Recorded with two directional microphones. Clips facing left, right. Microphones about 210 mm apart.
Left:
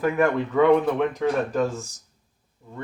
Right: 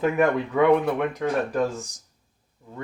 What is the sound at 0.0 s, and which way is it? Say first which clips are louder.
Speech: even; 15° right (ahead or behind).